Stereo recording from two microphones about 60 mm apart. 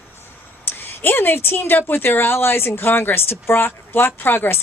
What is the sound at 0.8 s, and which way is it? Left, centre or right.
A woman's voice, left.